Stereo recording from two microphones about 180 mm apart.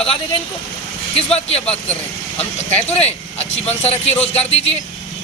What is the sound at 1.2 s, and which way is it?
Speech, 35° left (ahead or behind).